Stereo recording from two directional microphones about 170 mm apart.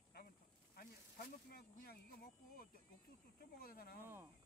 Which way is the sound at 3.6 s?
60° left (ahead or behind).